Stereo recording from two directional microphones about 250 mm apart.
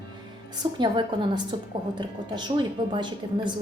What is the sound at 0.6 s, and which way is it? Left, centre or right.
A woman's voice, centre.